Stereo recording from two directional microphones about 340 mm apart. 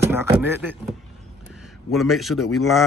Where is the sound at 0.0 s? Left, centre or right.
Centre.